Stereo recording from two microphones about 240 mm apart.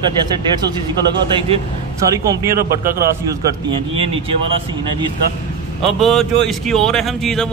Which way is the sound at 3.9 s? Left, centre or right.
Right.